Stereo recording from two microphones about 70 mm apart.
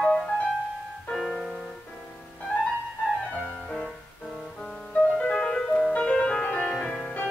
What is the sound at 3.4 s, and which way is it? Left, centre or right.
Music, centre.